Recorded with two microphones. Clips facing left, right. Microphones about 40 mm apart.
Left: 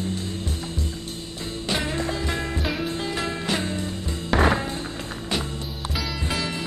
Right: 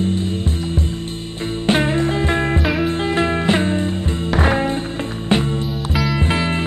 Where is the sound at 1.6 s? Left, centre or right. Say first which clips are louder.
Right 9 dB; right.